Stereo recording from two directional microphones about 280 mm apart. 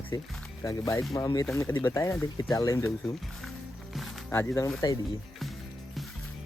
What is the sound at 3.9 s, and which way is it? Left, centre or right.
Speech, centre.